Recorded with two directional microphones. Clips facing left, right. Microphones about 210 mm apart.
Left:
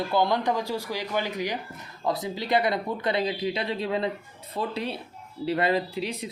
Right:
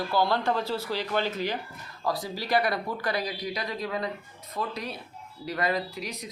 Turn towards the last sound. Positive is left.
turn(degrees=30)  # may be behind; listen again after turning